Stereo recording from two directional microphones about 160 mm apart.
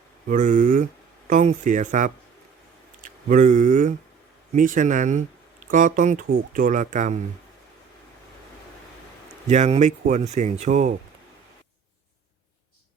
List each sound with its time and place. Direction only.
0.3 s speech: 50° right (ahead or behind)
9.5 s speech: 45° right (ahead or behind)